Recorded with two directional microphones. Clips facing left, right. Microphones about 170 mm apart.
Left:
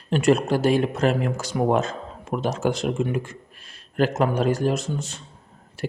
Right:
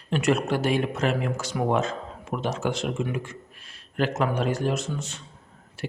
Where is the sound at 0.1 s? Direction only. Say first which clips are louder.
Left 4 dB; 35° left (ahead or behind).